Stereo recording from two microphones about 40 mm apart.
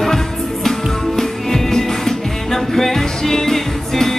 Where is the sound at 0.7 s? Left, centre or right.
Centre.